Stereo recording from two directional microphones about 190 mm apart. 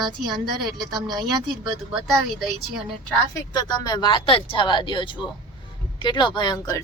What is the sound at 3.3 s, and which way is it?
Speech, 20° left (ahead or behind).